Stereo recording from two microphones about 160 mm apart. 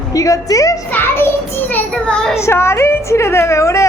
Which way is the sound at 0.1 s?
20° left (ahead or behind).